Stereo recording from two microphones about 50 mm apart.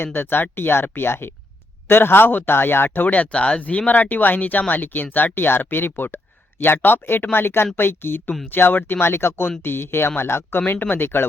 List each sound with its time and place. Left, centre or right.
0.0 s speech: left
3.3 s speech: left